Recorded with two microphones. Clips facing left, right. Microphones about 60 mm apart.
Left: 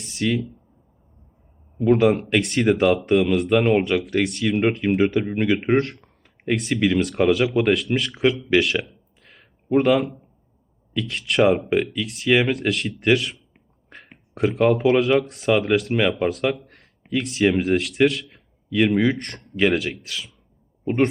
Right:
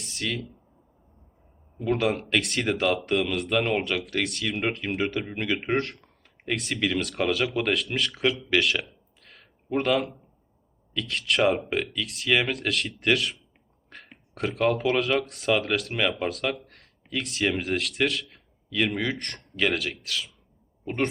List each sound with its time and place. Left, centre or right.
0.1 s speech: centre
1.8 s speech: centre
2.6 s speech: centre
2.9 s speech: centre
7.3 s speech: centre
8.9 s a sound: centre
10.9 s speech: centre
18.7 s speech: centre